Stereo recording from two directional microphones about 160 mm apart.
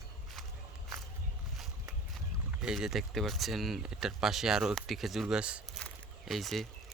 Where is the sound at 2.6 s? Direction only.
5° right (ahead or behind).